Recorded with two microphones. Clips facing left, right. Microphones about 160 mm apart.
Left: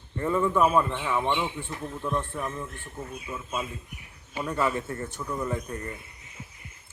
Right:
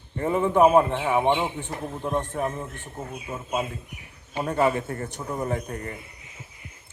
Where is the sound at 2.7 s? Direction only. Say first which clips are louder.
Right 2 dB; 20° right (ahead or behind).